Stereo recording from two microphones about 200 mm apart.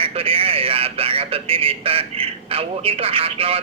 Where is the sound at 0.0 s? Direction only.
30° right (ahead or behind).